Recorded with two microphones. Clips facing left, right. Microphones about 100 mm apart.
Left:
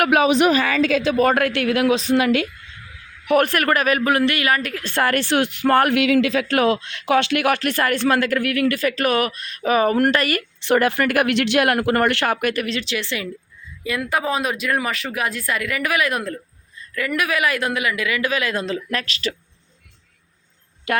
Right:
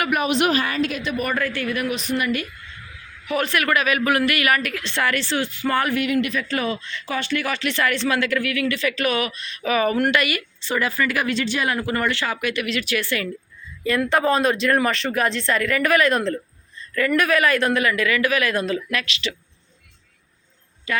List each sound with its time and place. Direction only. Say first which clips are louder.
1.1 s speech: left 7 dB; 85° left
3.2 s a woman's voice: left 5 dB; 55° left (ahead or behind); by 4.8 s 30° left (ahead or behind)
4.8 s speech: left 3 dB; 45° left (ahead or behind)
10.6 s speech: left 6 dB; 65° left (ahead or behind); by 12.6 s 50° left (ahead or behind)
12.6 s speech: right 1 dB; 25° left (ahead or behind)
13.8 s speech: right 3 dB; 10° left (ahead or behind); by 19.4 s 40° left (ahead or behind)
20.9 s speech: left 4 dB; 65° left (ahead or behind)